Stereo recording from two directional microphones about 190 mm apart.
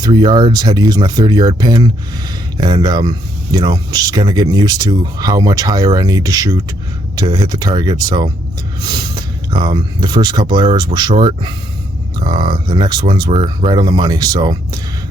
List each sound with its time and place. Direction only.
0.0 s speech: 25° right (ahead or behind)